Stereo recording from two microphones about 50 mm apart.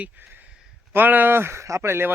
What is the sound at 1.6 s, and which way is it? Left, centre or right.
Speech, right.